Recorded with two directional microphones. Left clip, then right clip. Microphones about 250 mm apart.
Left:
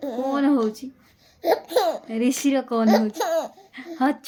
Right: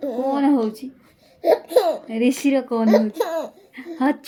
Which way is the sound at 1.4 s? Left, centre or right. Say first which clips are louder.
Right 4 dB; centre.